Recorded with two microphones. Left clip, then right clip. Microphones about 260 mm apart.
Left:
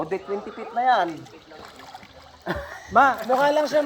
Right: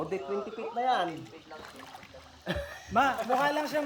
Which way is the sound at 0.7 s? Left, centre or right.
Centre.